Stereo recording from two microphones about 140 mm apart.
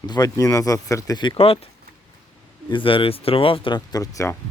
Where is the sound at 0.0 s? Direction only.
30° left (ahead or behind).